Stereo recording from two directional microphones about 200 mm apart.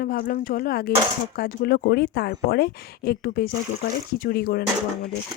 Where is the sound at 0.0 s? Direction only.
45° left (ahead or behind).